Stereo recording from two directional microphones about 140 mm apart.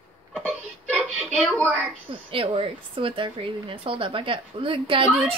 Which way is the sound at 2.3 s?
40° right (ahead or behind).